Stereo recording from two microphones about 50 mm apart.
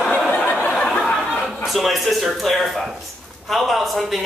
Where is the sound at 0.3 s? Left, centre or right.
Left.